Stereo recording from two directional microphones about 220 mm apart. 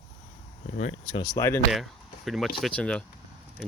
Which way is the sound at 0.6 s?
30° left (ahead or behind).